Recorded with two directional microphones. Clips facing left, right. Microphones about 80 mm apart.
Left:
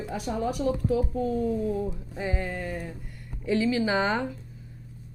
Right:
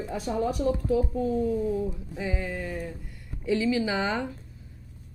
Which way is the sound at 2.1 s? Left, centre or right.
Left.